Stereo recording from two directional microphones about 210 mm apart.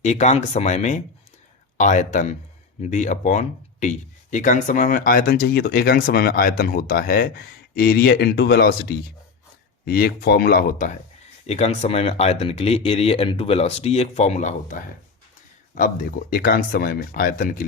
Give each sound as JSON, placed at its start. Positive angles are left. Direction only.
{"t": 0.0, "sound": "speech", "side_deg": 35}